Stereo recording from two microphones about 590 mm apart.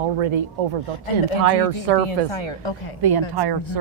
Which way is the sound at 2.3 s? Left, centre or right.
Left.